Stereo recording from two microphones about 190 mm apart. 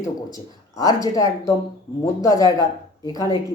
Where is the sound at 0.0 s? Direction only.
20° left (ahead or behind).